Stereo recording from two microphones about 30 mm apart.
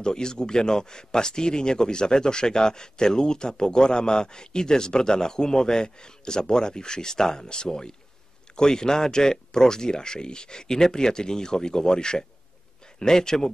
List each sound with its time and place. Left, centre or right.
0.0 s speech: left